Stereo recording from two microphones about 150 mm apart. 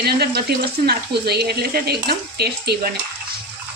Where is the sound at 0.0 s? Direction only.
90° right.